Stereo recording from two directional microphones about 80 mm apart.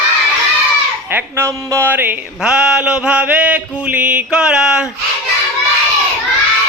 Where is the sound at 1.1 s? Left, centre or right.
Right.